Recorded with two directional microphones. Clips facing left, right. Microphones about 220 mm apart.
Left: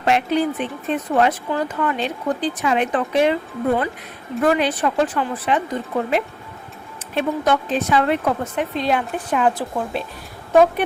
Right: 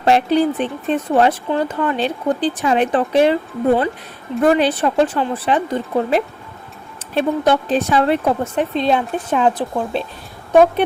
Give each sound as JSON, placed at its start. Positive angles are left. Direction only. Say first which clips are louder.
{"t": 0.0, "sound": "speech", "louder": "right 4 dB", "side_deg": -35}
{"t": 4.4, "sound": "speech", "louder": "right 4 dB", "side_deg": -30}